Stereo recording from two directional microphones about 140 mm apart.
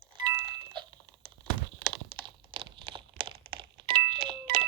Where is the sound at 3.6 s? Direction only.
35° right (ahead or behind).